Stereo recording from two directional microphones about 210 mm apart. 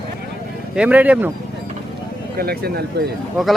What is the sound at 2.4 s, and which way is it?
Speech, 50° right (ahead or behind).